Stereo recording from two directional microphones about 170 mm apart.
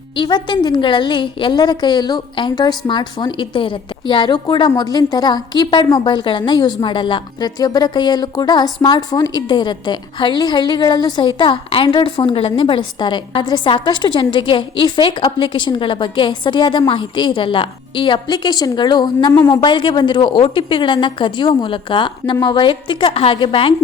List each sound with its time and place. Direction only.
0.2 s a woman's voice: 25° left (ahead or behind)